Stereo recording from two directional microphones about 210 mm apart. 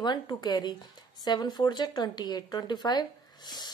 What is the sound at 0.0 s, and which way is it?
Speech, 20° left (ahead or behind).